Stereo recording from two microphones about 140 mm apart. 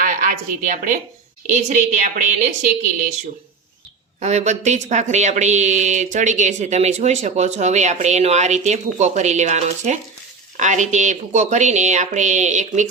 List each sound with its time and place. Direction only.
0.0 s a woman's voice: 70° right (ahead or behind)
4.2 s a woman's voice: 55° right (ahead or behind)